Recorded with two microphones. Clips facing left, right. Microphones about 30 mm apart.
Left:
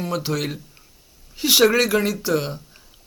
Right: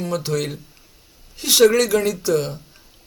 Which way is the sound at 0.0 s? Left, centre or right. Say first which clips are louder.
Right 1 dB; centre.